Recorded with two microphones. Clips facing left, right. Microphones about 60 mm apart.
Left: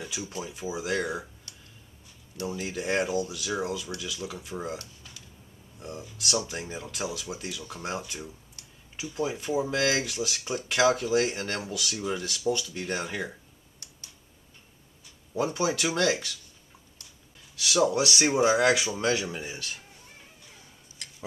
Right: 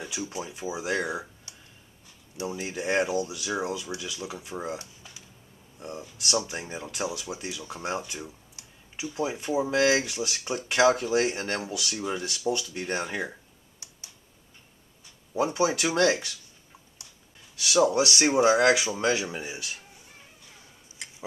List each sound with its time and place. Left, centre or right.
0.0 s speech: centre
6.2 s speech: centre
15.3 s speech: centre
17.6 s speech: centre
21.0 s tick-tock: centre